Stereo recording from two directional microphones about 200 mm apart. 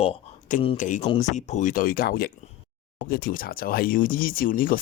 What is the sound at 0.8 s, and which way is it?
Speech, 40° left (ahead or behind).